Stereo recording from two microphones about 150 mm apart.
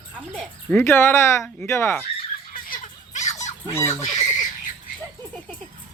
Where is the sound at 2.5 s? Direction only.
65° left (ahead or behind).